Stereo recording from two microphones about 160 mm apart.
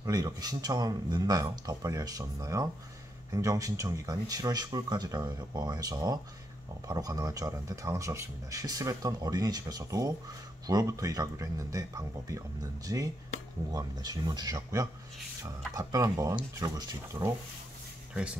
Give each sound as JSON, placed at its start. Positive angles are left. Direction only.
{"t": 0.0, "sound": "speech", "side_deg": -20}
{"t": 18.1, "sound": "speech", "side_deg": -5}